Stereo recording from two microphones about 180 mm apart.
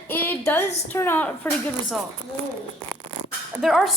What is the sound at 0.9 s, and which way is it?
Speech, 15° left (ahead or behind).